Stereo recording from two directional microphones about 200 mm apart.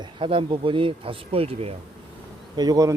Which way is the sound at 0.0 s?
25° right (ahead or behind).